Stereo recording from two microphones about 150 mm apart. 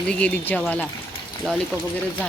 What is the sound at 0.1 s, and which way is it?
Speech, 5° left (ahead or behind).